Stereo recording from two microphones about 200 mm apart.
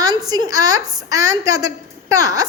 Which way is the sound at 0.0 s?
20° right (ahead or behind).